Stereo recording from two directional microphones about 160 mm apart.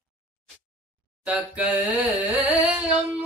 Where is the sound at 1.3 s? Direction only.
10° right (ahead or behind).